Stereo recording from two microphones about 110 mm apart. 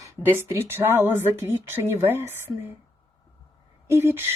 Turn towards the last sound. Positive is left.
turn(degrees=-20)  # may be behind; listen again after turning